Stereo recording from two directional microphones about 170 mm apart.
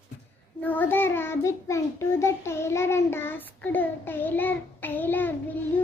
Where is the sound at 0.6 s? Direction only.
10° left (ahead or behind).